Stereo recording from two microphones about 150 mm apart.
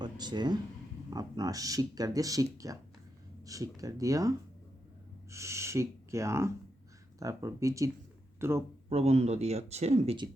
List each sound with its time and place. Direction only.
0.0 s speech: 30° right (ahead or behind)
8.9 s speech: 45° right (ahead or behind)